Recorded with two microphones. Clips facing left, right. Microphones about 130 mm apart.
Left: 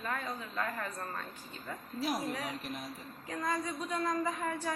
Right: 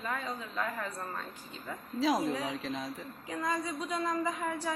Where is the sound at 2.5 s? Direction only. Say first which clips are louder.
Right 4 dB; 90° right.